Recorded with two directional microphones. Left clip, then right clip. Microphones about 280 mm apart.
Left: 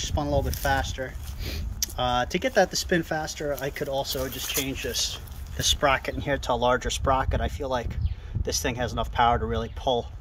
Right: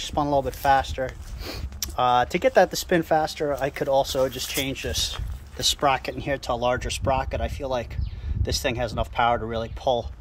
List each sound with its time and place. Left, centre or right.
0.0 s speech: centre